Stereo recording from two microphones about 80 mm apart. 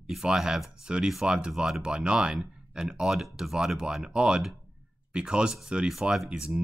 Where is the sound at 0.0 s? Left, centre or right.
Centre.